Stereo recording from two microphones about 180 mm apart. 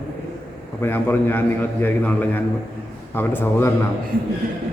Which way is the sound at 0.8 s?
10° left (ahead or behind).